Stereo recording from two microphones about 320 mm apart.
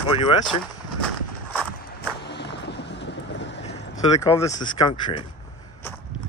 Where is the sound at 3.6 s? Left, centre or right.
Centre.